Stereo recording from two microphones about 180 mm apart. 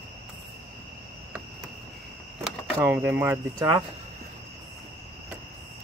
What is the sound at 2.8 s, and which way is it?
Speech, 10° right (ahead or behind).